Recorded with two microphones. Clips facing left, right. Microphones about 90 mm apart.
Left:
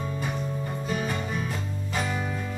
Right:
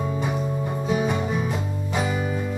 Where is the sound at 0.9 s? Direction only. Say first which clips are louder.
Right 7 dB; 5° right (ahead or behind).